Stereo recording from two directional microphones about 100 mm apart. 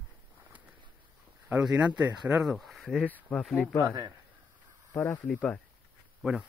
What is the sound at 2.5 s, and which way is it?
Speech, centre (ahead or behind).